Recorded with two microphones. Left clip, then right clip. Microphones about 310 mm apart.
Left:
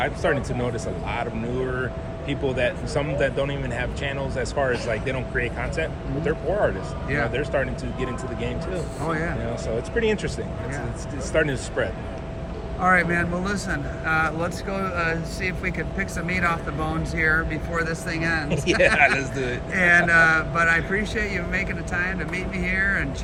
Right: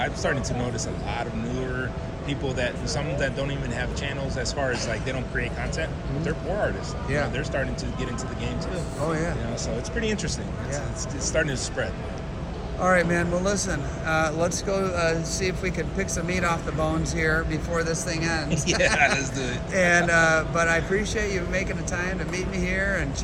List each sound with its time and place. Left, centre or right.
0.0 s speech: left
2.3 s speech: left
9.6 s speech: left
11.3 s speech: left
12.8 s speech: centre
18.5 s speech: left
19.7 s speech: centre